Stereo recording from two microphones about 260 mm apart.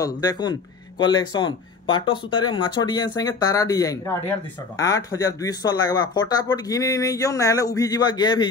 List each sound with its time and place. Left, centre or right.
0.0 s speech: centre